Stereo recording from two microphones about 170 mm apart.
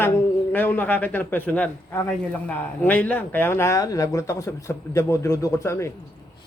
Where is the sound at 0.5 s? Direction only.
10° left (ahead or behind).